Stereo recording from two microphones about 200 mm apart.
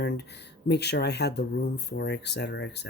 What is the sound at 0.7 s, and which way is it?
Speech, 55° left (ahead or behind).